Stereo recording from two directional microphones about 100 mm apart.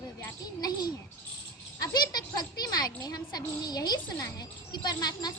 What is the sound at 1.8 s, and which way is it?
A child's voice, 40° left (ahead or behind).